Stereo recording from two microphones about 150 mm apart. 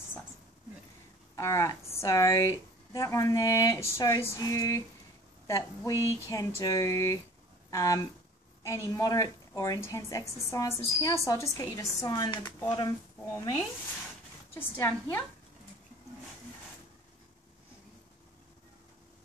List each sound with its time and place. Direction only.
1.3 s speech: 20° left (ahead or behind)
14.5 s a woman's voice: 15° left (ahead or behind)